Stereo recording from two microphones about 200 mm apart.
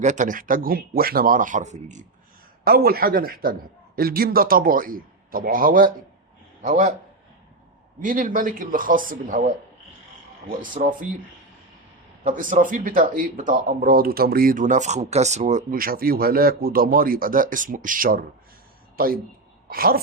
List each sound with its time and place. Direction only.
0.0 s speech: 40° right (ahead or behind)
2.6 s a man's voice: 50° right (ahead or behind)
8.0 s speech: 45° right (ahead or behind)
10.6 s a man's voice: 40° right (ahead or behind)
12.2 s a woman's voice: 40° right (ahead or behind)